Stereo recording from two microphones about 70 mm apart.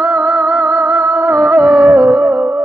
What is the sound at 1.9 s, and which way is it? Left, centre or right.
Music, right.